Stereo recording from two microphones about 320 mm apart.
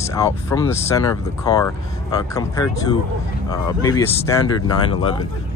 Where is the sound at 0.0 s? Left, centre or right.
Centre.